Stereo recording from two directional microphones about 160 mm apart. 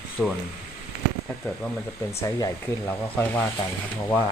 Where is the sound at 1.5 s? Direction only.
15° left (ahead or behind).